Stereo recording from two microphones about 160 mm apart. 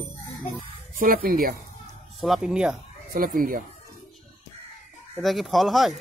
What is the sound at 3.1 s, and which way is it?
Speech, 60° right (ahead or behind).